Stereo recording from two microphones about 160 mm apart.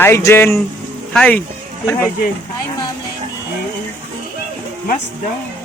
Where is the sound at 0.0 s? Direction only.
15° left (ahead or behind).